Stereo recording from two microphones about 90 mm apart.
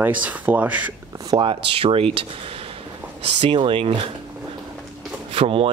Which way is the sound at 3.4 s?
70° right (ahead or behind).